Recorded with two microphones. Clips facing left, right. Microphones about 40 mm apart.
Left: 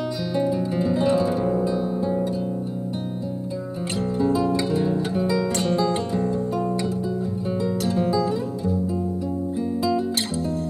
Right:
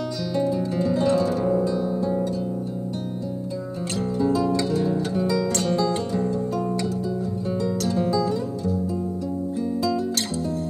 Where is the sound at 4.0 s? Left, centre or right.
Left.